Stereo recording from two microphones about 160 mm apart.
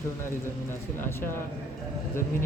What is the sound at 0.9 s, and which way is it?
Speech, 15° left (ahead or behind).